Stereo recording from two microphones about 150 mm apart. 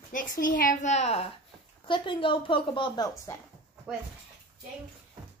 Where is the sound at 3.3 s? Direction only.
20° left (ahead or behind).